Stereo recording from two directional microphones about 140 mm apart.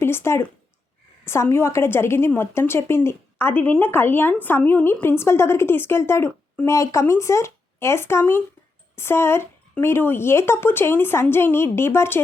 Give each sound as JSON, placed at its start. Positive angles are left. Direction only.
{"t": 0.0, "sound": "a woman's voice", "side_deg": 15}